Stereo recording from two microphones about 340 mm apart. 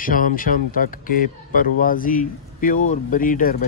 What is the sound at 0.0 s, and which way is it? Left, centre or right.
Speech, left.